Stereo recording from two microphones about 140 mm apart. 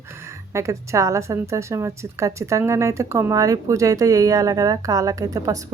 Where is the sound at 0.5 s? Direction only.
20° right (ahead or behind).